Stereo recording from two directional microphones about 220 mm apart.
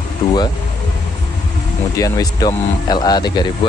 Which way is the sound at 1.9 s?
15° left (ahead or behind).